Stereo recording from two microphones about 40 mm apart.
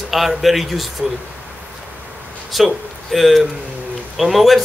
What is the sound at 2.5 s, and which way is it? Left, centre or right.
Speech, centre.